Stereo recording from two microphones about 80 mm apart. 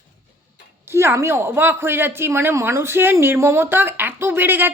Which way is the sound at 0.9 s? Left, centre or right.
Right.